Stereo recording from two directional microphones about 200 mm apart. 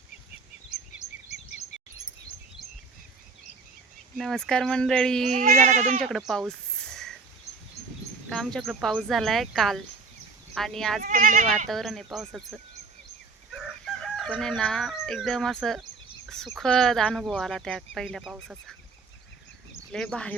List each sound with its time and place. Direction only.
4.2 s speech: centre (ahead or behind)
5.3 s speech: 40° right (ahead or behind)
6.0 s a sound: centre (ahead or behind)
8.3 s speech: centre (ahead or behind)
11.0 s speech: 45° right (ahead or behind)
11.7 s speech: centre (ahead or behind)
13.5 s speech: centre (ahead or behind)
19.9 s speech: 5° left (ahead or behind)